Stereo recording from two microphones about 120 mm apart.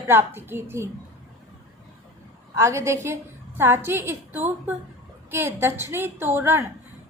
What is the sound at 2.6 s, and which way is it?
A woman's voice, 25° right (ahead or behind).